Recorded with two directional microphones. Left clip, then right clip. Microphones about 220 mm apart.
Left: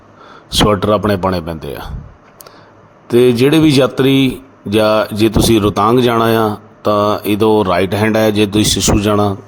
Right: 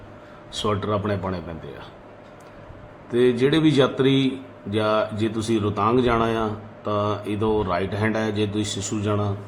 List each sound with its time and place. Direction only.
0.7 s speech: 40° left (ahead or behind)
3.1 s speech: 40° left (ahead or behind)